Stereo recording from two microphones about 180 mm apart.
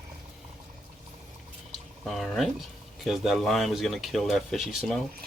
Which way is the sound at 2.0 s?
Centre (ahead or behind).